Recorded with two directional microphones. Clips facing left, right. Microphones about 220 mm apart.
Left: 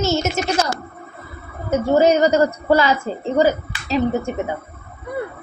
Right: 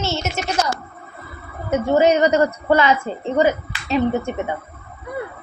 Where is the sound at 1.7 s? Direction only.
40° left (ahead or behind).